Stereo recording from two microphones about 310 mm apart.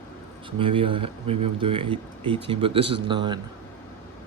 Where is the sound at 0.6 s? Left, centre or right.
Centre.